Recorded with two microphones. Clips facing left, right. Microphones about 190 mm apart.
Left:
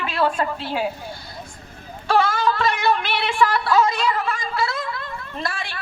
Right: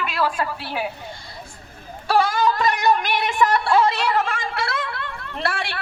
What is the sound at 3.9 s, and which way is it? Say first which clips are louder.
Speech: right 1 dB; 70° right (ahead or behind).